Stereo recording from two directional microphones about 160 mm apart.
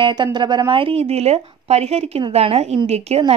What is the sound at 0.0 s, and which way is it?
Speech, 30° right (ahead or behind).